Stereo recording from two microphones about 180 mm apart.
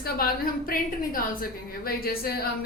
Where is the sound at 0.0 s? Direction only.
55° left (ahead or behind).